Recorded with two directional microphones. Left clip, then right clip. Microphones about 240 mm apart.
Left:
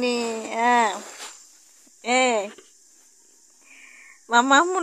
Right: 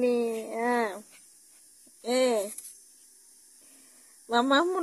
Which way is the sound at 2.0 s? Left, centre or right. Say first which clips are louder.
Left 5 dB; centre.